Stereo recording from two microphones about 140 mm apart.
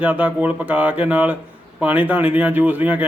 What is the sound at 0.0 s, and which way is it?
Speech, 10° right (ahead or behind).